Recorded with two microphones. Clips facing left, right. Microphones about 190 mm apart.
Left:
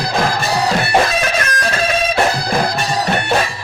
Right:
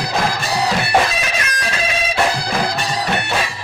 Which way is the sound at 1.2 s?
50° left (ahead or behind).